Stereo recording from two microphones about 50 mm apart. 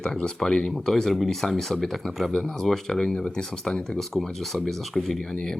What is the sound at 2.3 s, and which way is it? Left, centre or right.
Speech, centre.